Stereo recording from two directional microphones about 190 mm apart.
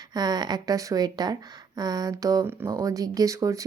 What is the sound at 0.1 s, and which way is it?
A woman's voice, 20° right (ahead or behind).